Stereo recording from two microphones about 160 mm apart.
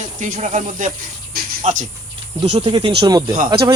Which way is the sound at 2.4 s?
40° right (ahead or behind).